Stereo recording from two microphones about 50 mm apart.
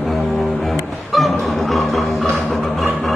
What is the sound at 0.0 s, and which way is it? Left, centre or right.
Music, centre.